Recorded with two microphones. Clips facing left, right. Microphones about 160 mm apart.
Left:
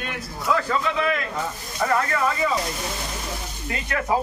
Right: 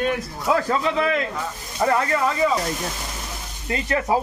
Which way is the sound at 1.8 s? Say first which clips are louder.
Right 3 dB; 25° right (ahead or behind).